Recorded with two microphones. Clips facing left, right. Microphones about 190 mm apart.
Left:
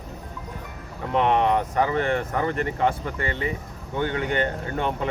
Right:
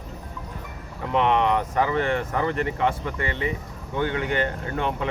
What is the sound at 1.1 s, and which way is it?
Speech, 45° left (ahead or behind).